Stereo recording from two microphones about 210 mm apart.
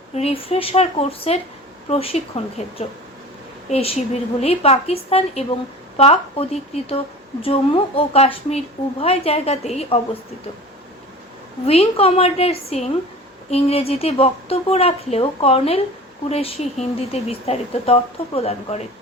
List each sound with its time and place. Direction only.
0.1 s speech: 30° left (ahead or behind)
11.6 s speech: 30° left (ahead or behind)